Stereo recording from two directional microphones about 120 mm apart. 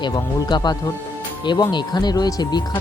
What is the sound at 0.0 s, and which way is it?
Speech, 35° left (ahead or behind).